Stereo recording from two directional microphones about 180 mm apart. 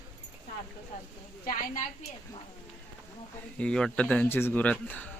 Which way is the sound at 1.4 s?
45° left (ahead or behind).